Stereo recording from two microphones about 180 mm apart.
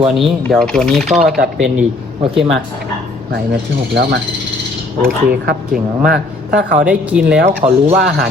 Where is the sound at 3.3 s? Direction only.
65° right (ahead or behind).